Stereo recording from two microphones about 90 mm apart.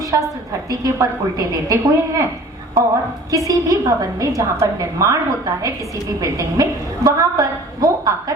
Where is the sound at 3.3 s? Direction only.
40° right (ahead or behind).